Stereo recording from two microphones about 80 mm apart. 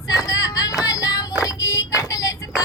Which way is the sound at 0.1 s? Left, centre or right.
Left.